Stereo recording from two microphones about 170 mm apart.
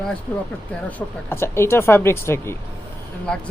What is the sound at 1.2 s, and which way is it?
Speech, 15° left (ahead or behind).